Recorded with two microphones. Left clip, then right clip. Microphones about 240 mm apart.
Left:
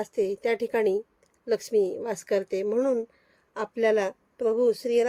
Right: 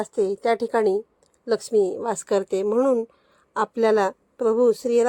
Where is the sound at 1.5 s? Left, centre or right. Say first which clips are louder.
Right 4 dB; centre.